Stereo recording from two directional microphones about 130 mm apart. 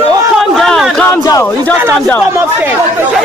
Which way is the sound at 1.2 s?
25° left (ahead or behind).